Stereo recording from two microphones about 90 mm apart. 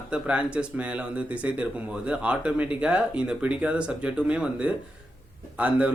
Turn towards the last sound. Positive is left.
turn(degrees=-15)  # may be behind; listen again after turning